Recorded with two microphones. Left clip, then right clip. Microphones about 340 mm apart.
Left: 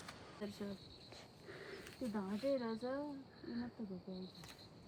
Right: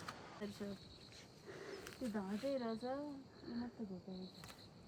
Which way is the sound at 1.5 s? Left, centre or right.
Centre.